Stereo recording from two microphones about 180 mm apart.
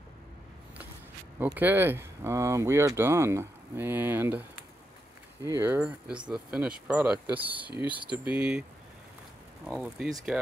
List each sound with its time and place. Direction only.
1.6 s speech: 10° right (ahead or behind)
5.4 s speech: 15° right (ahead or behind)
9.7 s speech: centre (ahead or behind)